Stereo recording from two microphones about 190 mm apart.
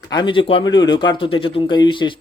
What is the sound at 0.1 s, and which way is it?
Speech, 25° left (ahead or behind).